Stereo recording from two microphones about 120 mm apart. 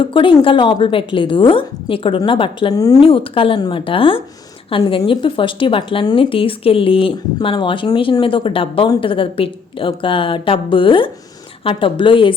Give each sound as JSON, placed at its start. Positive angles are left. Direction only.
{"t": 0.0, "sound": "speech", "side_deg": 45}
{"t": 2.7, "sound": "speech", "side_deg": 30}
{"t": 3.0, "sound": "speech", "side_deg": 50}